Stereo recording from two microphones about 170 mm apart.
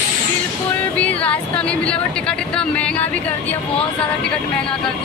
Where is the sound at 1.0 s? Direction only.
10° left (ahead or behind).